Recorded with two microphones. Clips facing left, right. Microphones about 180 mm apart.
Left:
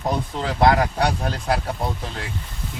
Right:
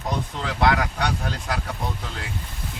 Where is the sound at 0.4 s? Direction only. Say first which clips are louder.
Left 4 dB; 35° left (ahead or behind).